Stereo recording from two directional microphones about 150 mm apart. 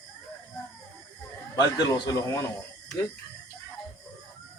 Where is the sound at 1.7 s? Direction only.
30° left (ahead or behind).